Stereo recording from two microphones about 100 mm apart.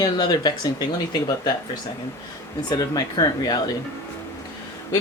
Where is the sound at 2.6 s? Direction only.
40° left (ahead or behind).